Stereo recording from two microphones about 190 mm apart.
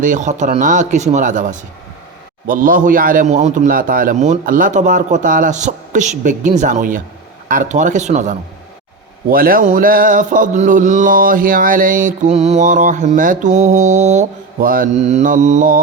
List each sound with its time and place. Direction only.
0.0 s speech: 40° right (ahead or behind)
2.5 s mantra: 45° right (ahead or behind)
6.6 s speech: 40° right (ahead or behind)
9.3 s mantra: 50° right (ahead or behind)